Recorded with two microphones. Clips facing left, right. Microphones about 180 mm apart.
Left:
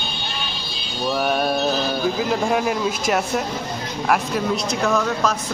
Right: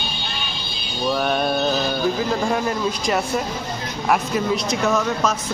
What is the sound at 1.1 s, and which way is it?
Speech, 5° left (ahead or behind).